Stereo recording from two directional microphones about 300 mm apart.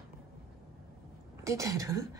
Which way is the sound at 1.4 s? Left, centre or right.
Centre.